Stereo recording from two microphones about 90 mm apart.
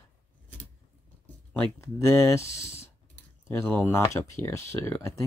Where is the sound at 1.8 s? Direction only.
30° left (ahead or behind).